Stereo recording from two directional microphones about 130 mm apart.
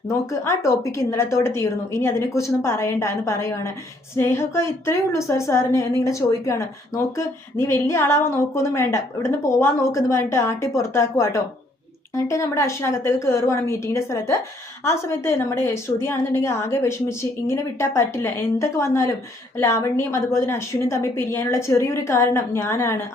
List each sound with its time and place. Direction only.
0.1 s a woman's voice: 20° left (ahead or behind)